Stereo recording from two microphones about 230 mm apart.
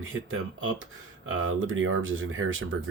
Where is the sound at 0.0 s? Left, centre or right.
Right.